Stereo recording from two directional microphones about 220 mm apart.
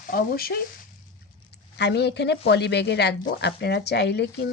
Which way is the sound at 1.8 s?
50° left (ahead or behind).